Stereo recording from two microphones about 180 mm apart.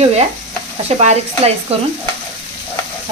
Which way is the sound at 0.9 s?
40° right (ahead or behind).